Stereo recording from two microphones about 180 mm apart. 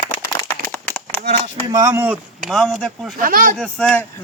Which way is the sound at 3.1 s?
50° right (ahead or behind).